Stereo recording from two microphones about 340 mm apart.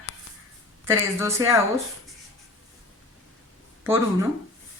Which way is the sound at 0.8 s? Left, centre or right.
Centre.